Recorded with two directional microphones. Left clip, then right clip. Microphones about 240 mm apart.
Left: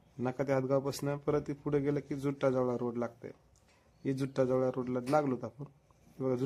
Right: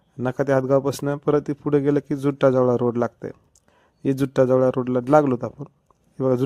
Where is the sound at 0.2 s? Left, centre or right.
Right.